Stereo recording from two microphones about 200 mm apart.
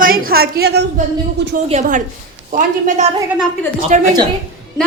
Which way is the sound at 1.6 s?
35° right (ahead or behind).